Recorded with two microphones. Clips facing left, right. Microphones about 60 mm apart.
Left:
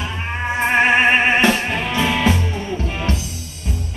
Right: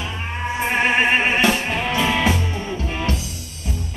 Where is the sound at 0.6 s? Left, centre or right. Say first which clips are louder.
Left 4 dB; left.